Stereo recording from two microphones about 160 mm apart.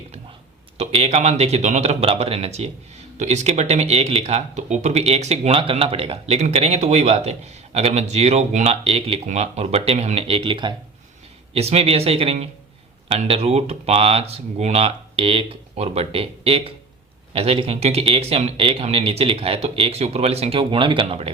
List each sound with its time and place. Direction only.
0.8 s speech: 40° right (ahead or behind)